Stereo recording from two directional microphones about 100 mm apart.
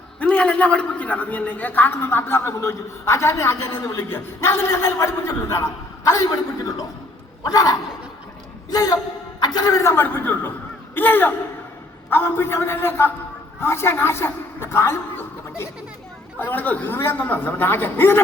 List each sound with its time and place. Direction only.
0.2 s a man's voice: 15° left (ahead or behind)